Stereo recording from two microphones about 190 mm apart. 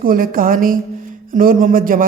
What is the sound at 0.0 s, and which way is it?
A man's voice, 50° right (ahead or behind).